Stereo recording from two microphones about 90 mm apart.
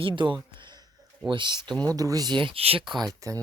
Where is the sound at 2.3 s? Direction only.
65° right (ahead or behind); by 2.8 s 90° right.